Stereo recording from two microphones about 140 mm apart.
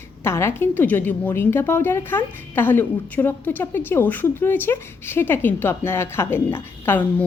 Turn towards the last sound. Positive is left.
turn(degrees=15)  # may be behind; listen again after turning